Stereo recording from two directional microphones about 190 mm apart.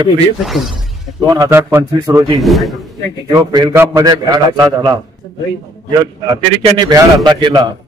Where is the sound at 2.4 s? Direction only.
Centre (ahead or behind).